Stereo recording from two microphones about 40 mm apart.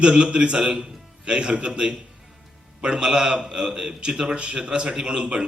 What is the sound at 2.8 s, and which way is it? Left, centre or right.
A man's voice, right.